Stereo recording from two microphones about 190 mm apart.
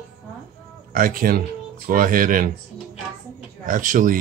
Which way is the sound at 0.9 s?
50° right (ahead or behind).